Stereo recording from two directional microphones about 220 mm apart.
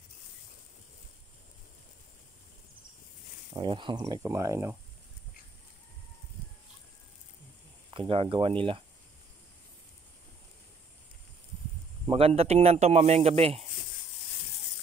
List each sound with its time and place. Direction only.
3.5 s speech: 20° right (ahead or behind)
7.9 s speech: 25° right (ahead or behind)
12.1 s speech: 25° right (ahead or behind)